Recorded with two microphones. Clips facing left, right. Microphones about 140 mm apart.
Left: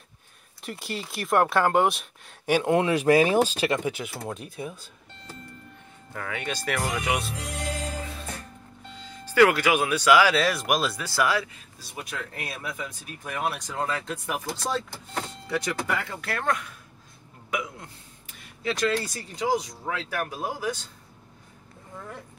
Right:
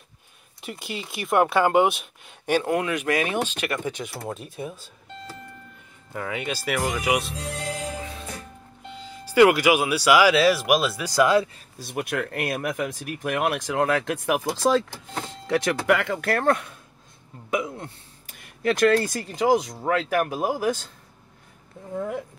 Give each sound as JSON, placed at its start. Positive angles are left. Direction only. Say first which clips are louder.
{"t": 0.6, "sound": "speech", "louder": "even", "side_deg": 0}
{"t": 2.4, "sound": "speech", "louder": "even", "side_deg": 10}
{"t": 2.7, "sound": "speech", "louder": "left 4 dB", "side_deg": 30}
{"t": 3.7, "sound": "speech", "louder": "left 2 dB", "side_deg": 10}
{"t": 6.1, "sound": "speech", "louder": "right 3 dB", "side_deg": -15}
{"t": 8.0, "sound": "music", "louder": "right 1 dB", "side_deg": 0}
{"t": 9.0, "sound": "speech", "louder": "right 3 dB", "side_deg": -10}
{"t": 11.1, "sound": "speech", "louder": "right 8 dB", "side_deg": -20}
{"t": 11.9, "sound": "speech", "louder": "right 9 dB", "side_deg": -70}
{"t": 16.3, "sound": "speech", "louder": "right 6 dB", "side_deg": -40}
{"t": 17.5, "sound": "hiccup", "louder": "right 5 dB", "side_deg": -25}
{"t": 18.6, "sound": "speech", "louder": "right 7 dB", "side_deg": -55}
{"t": 19.7, "sound": "speech", "louder": "right 8 dB", "side_deg": -70}